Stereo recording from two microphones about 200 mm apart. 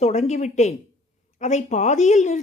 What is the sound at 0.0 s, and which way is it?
Speech, 35° left (ahead or behind).